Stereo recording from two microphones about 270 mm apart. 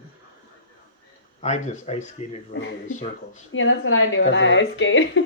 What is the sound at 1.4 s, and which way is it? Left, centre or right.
Speech, left.